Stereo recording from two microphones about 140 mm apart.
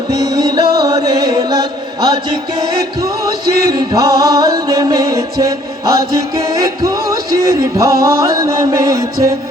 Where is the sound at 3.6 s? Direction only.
25° right (ahead or behind).